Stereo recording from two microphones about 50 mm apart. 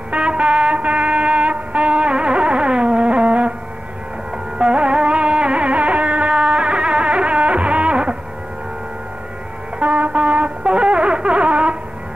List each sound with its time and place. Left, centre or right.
0.1 s music: right
4.6 s music: right
9.8 s music: right